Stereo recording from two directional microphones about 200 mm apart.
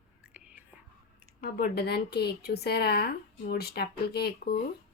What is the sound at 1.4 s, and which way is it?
Speech, 50° left (ahead or behind).